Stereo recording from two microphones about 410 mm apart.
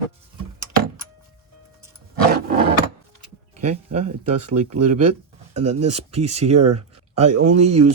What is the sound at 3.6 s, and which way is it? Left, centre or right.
Speech, centre.